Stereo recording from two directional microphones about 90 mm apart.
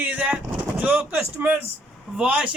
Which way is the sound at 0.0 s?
15° right (ahead or behind).